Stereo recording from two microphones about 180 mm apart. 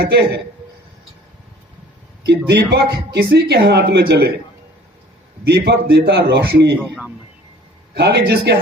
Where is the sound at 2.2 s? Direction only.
65° right (ahead or behind).